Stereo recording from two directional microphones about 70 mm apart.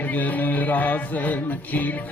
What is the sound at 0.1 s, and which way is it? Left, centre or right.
Music, left.